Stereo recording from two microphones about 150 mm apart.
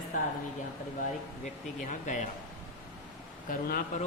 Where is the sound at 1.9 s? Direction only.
55° left (ahead or behind).